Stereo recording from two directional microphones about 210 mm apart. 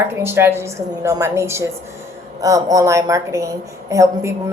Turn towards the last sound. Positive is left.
turn(degrees=-15)  # may be behind; listen again after turning